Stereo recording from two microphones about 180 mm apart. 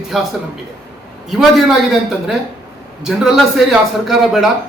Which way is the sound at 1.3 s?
Centre (ahead or behind).